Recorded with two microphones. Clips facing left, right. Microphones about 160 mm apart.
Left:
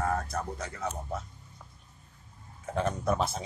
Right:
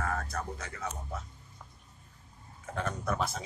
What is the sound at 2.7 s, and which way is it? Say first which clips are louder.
Speech: left 5 dB; 25° left (ahead or behind).